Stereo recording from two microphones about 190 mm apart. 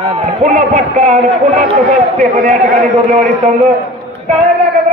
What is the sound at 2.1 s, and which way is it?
Speech, 50° right (ahead or behind).